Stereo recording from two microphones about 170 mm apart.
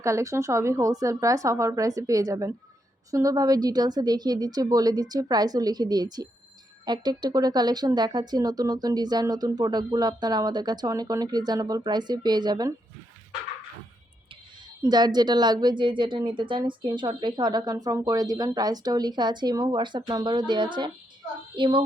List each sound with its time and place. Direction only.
0.0 s a woman's voice: 20° right (ahead or behind)
14.8 s a woman's voice: 25° right (ahead or behind)